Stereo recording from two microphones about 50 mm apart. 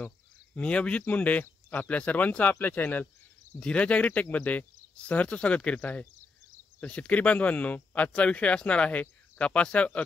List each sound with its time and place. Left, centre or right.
0.6 s speech: left
3.5 s speech: left